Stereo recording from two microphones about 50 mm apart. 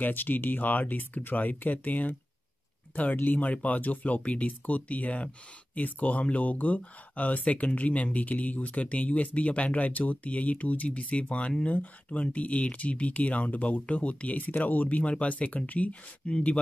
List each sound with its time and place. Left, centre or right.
0.0 s speech: left
16.3 s speech: centre